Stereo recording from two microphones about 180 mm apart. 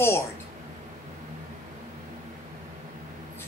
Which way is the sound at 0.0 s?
15° left (ahead or behind).